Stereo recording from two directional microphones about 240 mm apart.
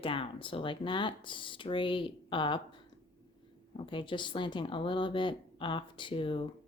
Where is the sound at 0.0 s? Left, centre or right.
Left.